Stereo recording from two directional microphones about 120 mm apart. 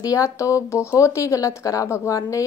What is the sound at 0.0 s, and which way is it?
Speech, 30° left (ahead or behind).